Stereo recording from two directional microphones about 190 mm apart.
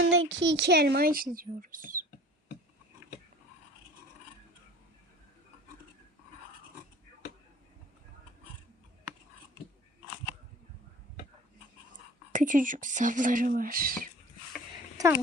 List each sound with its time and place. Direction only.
0.0 s speech: 85° right; by 2.0 s 45° right (ahead or behind)
12.3 s speech: 45° right (ahead or behind)